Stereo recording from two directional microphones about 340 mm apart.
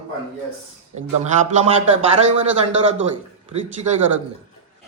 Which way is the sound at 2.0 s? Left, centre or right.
Centre.